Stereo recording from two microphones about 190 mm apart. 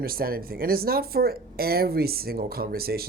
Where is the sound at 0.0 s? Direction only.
50° right (ahead or behind).